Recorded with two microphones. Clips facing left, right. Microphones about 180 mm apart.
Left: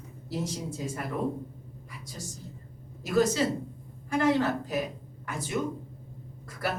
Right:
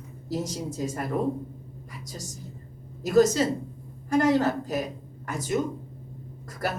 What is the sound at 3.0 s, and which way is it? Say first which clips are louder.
Speech: right 5 dB; 40° right (ahead or behind).